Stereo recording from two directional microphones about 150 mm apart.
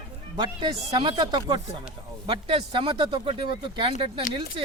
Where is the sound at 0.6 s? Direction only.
35° right (ahead or behind).